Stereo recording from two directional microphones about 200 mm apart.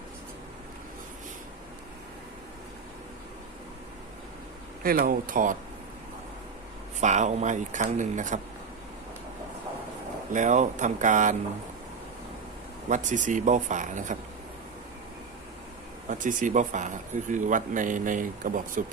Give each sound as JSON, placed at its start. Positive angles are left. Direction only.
{"t": 4.8, "sound": "speech", "side_deg": -45}
{"t": 7.0, "sound": "speech", "side_deg": -35}
{"t": 10.3, "sound": "speech", "side_deg": -40}
{"t": 12.9, "sound": "speech", "side_deg": -40}
{"t": 16.0, "sound": "speech", "side_deg": -40}